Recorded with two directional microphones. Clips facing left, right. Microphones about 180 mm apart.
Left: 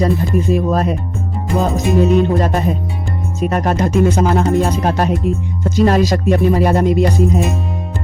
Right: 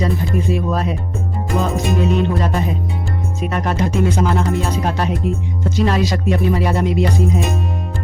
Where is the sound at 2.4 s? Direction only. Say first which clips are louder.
Left 3 dB; 45° left (ahead or behind).